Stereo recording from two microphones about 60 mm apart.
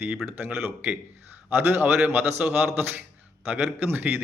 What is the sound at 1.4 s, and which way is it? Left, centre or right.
A man's voice, right.